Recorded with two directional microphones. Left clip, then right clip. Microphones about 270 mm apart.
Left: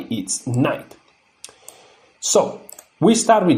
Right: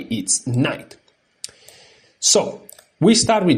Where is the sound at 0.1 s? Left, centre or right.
Right.